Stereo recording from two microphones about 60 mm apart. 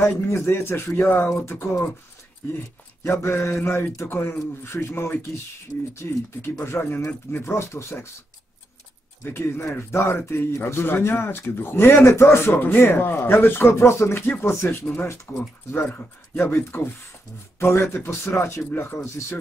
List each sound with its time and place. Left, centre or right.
0.0 s speech: left
1.0 s a man's voice: left
1.4 s speech: left
3.0 s a man's voice: left
9.2 s a man's voice: left
12.5 s a man's voice: left
15.3 s a man's voice: left
15.9 s a man's voice: left
18.7 s a man's voice: left
19.0 s speech: left